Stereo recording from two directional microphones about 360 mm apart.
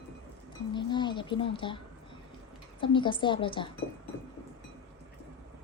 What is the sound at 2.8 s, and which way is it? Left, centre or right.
Speech, centre.